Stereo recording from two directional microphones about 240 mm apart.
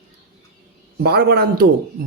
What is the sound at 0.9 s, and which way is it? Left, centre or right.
Speech, right.